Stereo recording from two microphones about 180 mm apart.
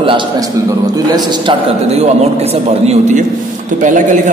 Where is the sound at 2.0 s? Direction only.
35° right (ahead or behind).